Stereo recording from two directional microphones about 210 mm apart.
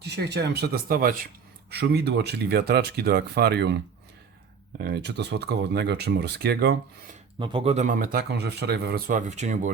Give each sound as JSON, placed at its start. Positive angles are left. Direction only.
{"t": 0.0, "sound": "speech", "side_deg": -55}
{"t": 4.8, "sound": "speech", "side_deg": -50}
{"t": 7.3, "sound": "a man's voice", "side_deg": -25}